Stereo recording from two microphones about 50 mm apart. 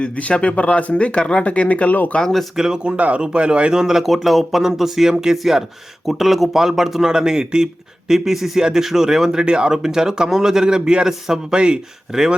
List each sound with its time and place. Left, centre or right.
0.0 s speech: left
2.2 s speech: centre
2.6 s speech: centre